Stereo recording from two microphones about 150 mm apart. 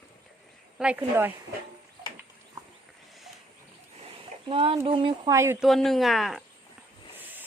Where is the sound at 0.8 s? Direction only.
10° right (ahead or behind).